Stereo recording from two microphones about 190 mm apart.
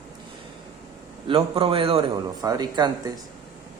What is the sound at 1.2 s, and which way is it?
Speech, 30° right (ahead or behind).